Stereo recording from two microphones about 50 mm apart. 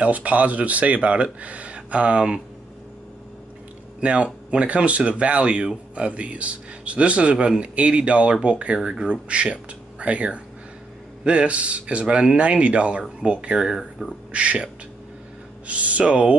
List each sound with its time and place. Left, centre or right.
0.0 s a man's voice: right
4.0 s a man's voice: right
14.3 s a man's voice: right